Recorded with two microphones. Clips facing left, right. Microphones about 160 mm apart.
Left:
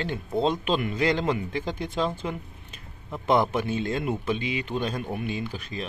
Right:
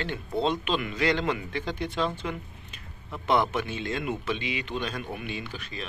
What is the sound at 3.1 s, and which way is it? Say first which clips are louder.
Speech: left 2 dB; 30° left (ahead or behind).